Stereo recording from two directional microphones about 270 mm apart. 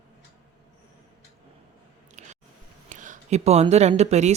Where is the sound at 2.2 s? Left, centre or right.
Right.